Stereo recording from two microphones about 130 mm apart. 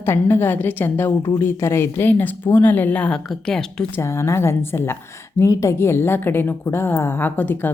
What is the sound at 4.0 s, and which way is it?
A woman's voice, 20° left (ahead or behind).